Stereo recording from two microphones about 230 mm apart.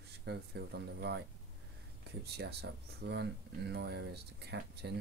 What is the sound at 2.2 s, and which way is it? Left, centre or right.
Speech, right.